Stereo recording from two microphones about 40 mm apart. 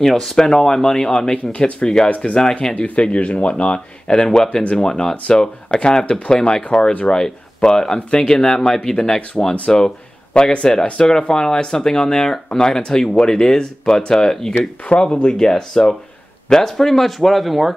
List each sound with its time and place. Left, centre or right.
0.0 s speech: centre
2.0 s speech: left
7.1 s speech: centre
14.9 s speech: left
15.2 s speech: centre